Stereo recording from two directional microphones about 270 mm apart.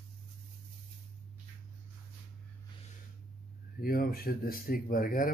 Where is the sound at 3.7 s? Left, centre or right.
Left.